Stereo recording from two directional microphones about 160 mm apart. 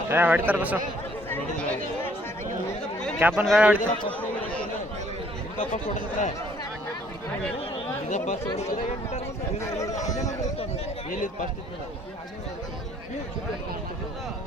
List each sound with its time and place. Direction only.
0.1 s a man's voice: 10° right (ahead or behind)
1.3 s speech: 10° left (ahead or behind)
3.2 s a man's voice: 10° right (ahead or behind)
5.5 s speech: 50° left (ahead or behind)
8.1 s speech: 45° left (ahead or behind)